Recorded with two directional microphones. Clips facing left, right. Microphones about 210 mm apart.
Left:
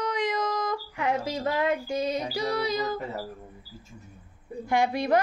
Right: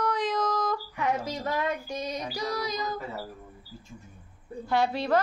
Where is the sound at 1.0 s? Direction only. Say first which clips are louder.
Left 3 dB; 25° left (ahead or behind).